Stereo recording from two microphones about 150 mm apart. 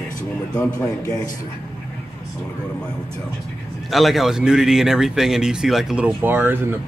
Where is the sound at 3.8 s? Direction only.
Centre (ahead or behind).